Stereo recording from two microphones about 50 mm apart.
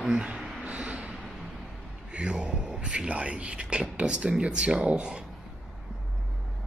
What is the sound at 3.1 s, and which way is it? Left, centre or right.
Speech, right.